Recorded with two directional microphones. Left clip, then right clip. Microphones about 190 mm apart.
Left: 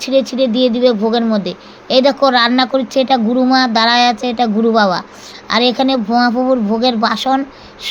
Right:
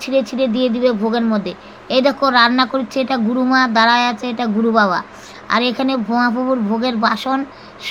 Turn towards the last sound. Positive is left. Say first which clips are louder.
# left 3 dB
turn(degrees=20)  # may be behind; listen again after turning